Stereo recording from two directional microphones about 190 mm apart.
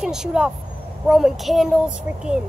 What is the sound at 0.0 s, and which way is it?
Speech, 5° right (ahead or behind).